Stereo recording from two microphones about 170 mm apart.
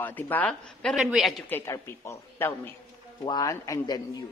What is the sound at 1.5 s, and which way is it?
A woman's voice, 15° left (ahead or behind).